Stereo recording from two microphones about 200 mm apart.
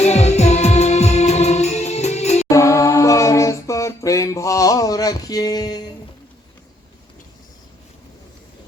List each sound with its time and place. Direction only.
0.0 s music: 35° left (ahead or behind)
2.5 s a capella: 15° left (ahead or behind)